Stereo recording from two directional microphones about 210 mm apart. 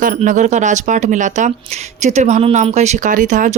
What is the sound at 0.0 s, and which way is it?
Speech, 35° right (ahead or behind).